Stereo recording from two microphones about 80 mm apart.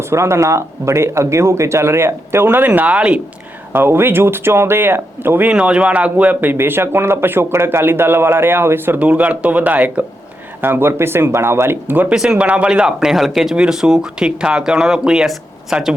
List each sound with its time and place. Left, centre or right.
0.0 s speech: right; by 3.2 s centre
3.7 s speech: right
5.5 s speech: centre
12.1 s speech: centre